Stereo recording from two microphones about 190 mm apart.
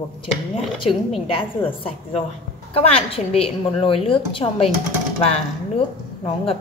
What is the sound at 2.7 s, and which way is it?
Speech, 30° left (ahead or behind).